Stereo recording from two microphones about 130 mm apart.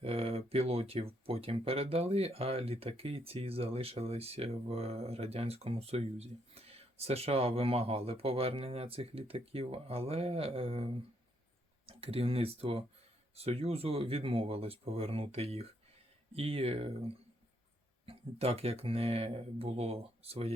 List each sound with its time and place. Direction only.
0.0 s speech: 50° right (ahead or behind)
18.0 s speech: 50° right (ahead or behind)